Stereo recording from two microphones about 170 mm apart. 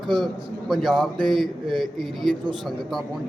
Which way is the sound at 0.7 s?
Centre (ahead or behind).